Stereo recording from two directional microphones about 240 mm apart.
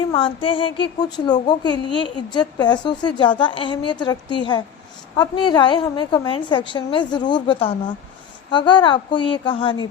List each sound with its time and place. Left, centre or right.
0.1 s speech: left